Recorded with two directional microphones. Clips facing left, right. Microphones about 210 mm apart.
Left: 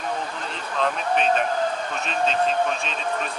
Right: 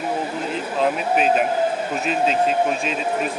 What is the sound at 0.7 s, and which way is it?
Speech, 5° right (ahead or behind).